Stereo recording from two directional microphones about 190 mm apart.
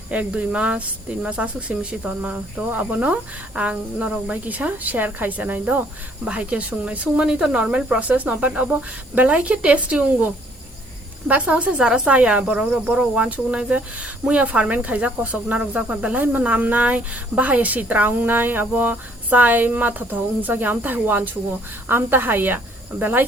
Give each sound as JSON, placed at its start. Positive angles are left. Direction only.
{"t": 0.1, "sound": "speech", "side_deg": -5}
{"t": 11.3, "sound": "speech", "side_deg": -5}